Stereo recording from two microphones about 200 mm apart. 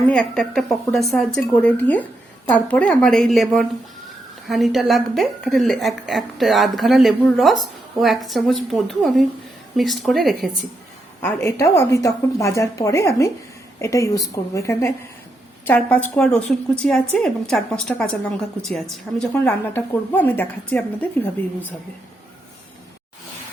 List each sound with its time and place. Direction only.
0.1 s a woman's voice: 5° left (ahead or behind)
11.2 s a woman's voice: 10° left (ahead or behind)